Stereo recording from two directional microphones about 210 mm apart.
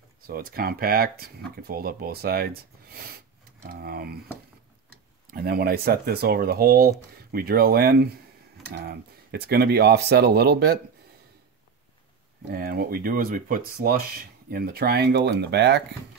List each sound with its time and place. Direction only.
0.3 s speech: 45° right (ahead or behind)
5.3 s speech: 45° right (ahead or behind)
12.4 s speech: 45° right (ahead or behind)